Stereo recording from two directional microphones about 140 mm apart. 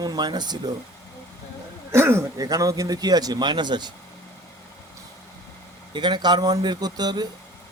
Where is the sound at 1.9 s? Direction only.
20° right (ahead or behind).